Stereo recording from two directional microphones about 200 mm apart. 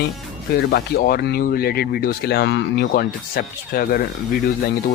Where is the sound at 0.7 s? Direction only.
50° left (ahead or behind).